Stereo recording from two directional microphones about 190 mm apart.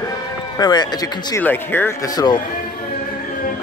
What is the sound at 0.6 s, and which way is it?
Speech, 20° left (ahead or behind).